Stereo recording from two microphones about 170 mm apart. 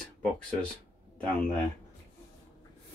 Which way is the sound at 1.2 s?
5° left (ahead or behind).